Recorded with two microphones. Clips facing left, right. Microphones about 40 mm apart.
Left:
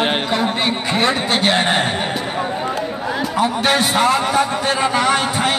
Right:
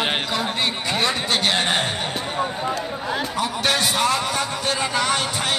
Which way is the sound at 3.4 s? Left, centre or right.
Left.